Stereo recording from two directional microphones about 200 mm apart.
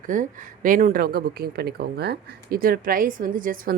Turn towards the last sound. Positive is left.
turn(degrees=-45)  # may be behind; listen again after turning